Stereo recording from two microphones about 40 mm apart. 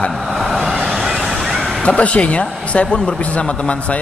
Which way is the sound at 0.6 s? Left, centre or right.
Centre.